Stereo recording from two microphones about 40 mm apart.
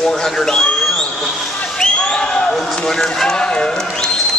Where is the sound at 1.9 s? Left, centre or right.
Left.